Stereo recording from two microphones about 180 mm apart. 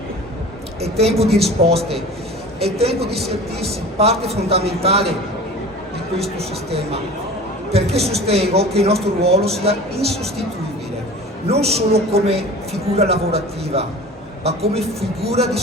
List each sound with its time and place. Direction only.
0.8 s a man's voice: 35° right (ahead or behind)
6.7 s a man's voice: 35° right (ahead or behind)
11.4 s a man's voice: 35° right (ahead or behind)